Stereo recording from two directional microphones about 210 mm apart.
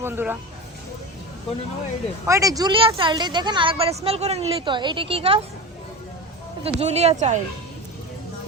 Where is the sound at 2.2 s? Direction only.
15° right (ahead or behind).